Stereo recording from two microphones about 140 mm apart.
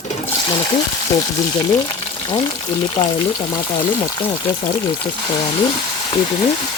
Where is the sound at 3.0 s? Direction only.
30° left (ahead or behind).